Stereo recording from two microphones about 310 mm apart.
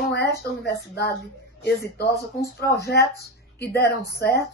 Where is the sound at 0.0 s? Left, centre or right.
Left.